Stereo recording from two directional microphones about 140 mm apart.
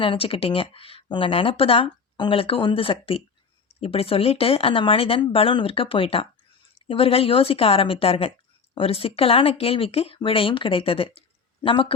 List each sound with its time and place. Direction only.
0.0 s a woman's voice: 40° left (ahead or behind)